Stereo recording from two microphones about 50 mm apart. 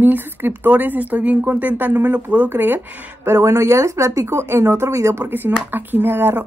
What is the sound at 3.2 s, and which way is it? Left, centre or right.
Speech, right.